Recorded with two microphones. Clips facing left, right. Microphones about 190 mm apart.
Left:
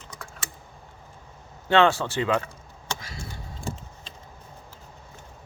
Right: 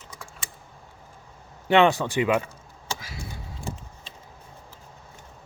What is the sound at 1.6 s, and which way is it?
Speech, 15° right (ahead or behind).